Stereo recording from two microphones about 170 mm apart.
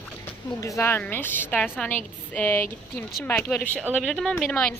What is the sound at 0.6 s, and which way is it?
Speech, 15° left (ahead or behind).